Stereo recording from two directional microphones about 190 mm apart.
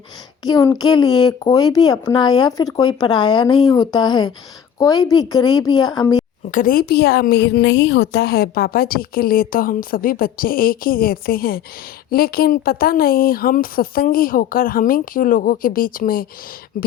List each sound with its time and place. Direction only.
0.4 s speech: 20° left (ahead or behind)
6.5 s a woman's voice: 45° left (ahead or behind)